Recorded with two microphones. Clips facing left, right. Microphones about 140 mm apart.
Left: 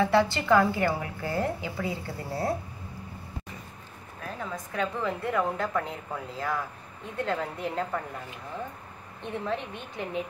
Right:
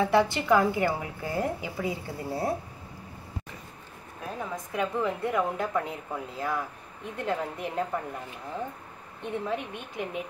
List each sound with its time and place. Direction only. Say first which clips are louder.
0.0 s a woman's voice: even; 15° right (ahead or behind)
4.4 s a woman's voice: right 1 dB; 15° right (ahead or behind)
9.4 s a woman's voice: left 2 dB; 10° right (ahead or behind)